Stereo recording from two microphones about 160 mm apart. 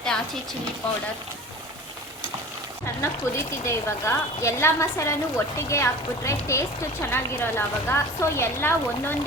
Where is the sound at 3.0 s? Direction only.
15° left (ahead or behind).